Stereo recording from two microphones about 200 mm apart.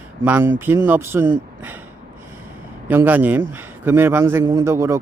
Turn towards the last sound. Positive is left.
turn(degrees=-15)  # may be behind; listen again after turning